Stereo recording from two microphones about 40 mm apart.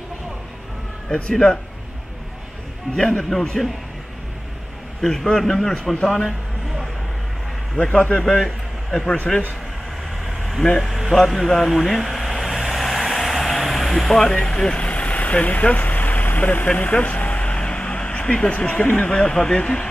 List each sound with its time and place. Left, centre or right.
1.3 s speech: centre
3.0 s a man's voice: centre
3.6 s a man's voice: centre
5.0 s a man's voice: centre
7.7 s a man's voice: left
8.5 s a sound: centre
10.8 s speech: centre
11.1 s vehicle: centre
14.4 s a man's voice: centre
14.9 s vehicle: left
17.0 s vehicle: left
18.2 s speech: left